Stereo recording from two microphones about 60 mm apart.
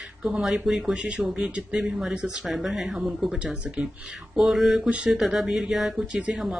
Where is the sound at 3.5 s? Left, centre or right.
Centre.